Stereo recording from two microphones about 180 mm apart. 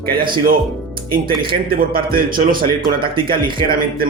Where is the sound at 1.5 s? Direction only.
55° right (ahead or behind).